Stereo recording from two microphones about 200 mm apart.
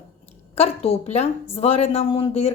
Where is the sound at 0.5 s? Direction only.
30° left (ahead or behind).